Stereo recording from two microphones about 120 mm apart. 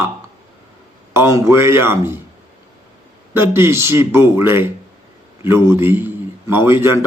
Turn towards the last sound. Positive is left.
turn(degrees=-20)  # may be behind; listen again after turning